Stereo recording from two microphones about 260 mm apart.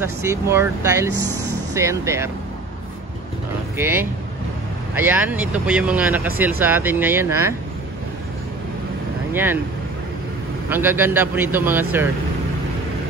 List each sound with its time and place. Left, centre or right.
0.0 s speech: centre
1.1 s speech: right
1.7 s speech: centre
3.7 s speech: centre
9.3 s speech: centre
10.7 s speech: centre